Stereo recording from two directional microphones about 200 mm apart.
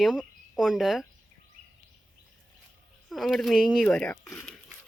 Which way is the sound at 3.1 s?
Centre (ahead or behind).